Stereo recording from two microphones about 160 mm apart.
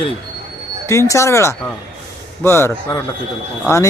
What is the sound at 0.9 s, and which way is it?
Speech, 20° left (ahead or behind).